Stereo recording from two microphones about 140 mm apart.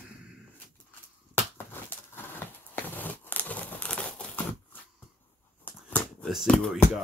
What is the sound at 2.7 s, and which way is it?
Crumpling, 15° left (ahead or behind).